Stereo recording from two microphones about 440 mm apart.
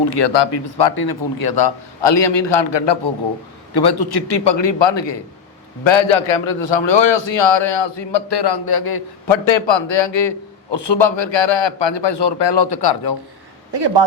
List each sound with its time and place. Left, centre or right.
0.0 s a man's voice: left
5.8 s a man's voice: left
9.3 s a man's voice: left
13.7 s a man's voice: right